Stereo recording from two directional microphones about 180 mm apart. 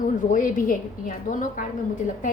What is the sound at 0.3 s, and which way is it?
A woman's voice, 45° left (ahead or behind).